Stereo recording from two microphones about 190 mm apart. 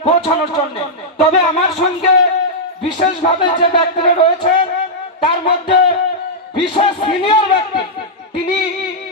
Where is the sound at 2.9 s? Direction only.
30° left (ahead or behind).